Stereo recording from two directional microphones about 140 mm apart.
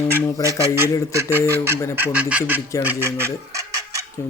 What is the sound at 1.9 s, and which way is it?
Goose, 10° right (ahead or behind).